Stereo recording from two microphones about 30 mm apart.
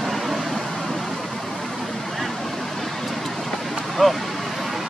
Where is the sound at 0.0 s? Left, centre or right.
Centre.